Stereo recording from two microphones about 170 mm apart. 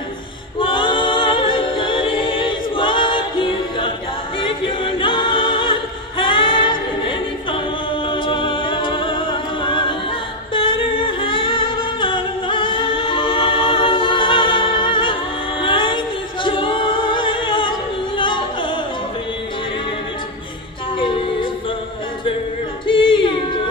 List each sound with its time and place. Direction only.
0.6 s a capella: 30° left (ahead or behind)
4.4 s choir: 30° left (ahead or behind)
9.6 s music: 30° left (ahead or behind)
10.5 s humming: 30° left (ahead or behind)
15.6 s music: 30° left (ahead or behind)
22.8 s yodeling: 30° left (ahead or behind)